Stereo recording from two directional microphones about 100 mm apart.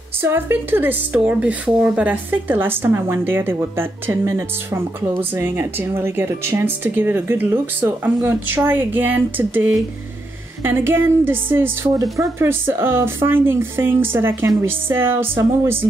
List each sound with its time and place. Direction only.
0.2 s a woman's voice: 25° right (ahead or behind)
11.9 s speech: 35° right (ahead or behind)
12.4 s a woman's voice: 25° right (ahead or behind)